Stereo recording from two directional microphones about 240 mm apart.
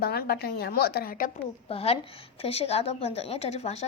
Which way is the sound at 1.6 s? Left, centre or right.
Left.